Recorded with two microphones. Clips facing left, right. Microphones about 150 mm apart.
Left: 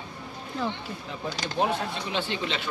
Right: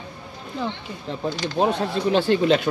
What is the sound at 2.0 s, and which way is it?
Speech, 45° right (ahead or behind).